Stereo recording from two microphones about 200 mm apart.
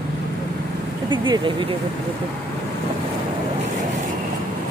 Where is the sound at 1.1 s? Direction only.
25° right (ahead or behind).